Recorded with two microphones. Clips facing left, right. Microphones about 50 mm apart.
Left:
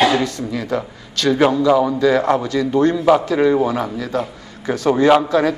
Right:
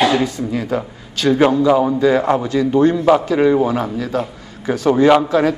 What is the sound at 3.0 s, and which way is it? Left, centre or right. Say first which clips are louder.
Speech: right 1 dB; centre.